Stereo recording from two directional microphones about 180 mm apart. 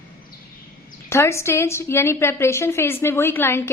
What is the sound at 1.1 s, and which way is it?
A woman's voice, 15° left (ahead or behind).